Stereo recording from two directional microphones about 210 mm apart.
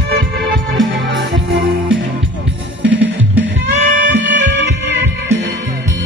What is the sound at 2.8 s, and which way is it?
Music, 60° right (ahead or behind).